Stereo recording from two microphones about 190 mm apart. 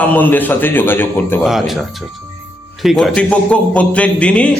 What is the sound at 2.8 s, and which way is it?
A man's voice, centre (ahead or behind).